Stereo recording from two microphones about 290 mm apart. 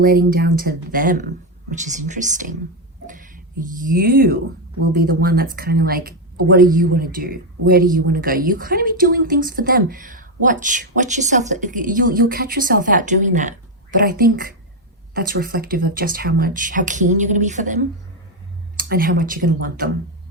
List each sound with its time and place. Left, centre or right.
0.0 s speech: right
18.9 s speech: right